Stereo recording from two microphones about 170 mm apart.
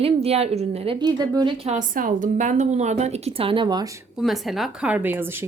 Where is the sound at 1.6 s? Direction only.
45° right (ahead or behind); by 4.0 s 25° right (ahead or behind).